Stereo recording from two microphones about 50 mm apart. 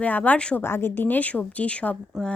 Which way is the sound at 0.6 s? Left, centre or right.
Left.